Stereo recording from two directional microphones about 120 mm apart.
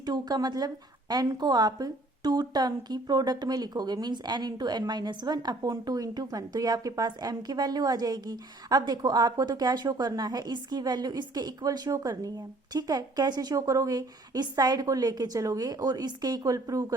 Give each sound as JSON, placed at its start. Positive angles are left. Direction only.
{"t": 0.0, "sound": "a woman's voice", "side_deg": -35}